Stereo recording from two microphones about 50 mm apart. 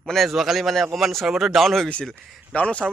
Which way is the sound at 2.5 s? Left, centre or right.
Left.